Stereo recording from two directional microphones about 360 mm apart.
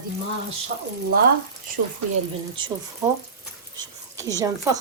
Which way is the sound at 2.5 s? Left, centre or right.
Centre.